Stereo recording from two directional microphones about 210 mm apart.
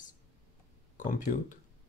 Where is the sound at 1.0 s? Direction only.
40° left (ahead or behind).